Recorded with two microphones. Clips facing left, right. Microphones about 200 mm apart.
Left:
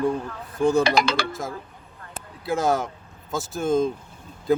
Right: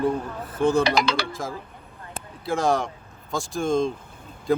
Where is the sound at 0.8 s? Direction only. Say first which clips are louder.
Left 1 dB; 50° left (ahead or behind).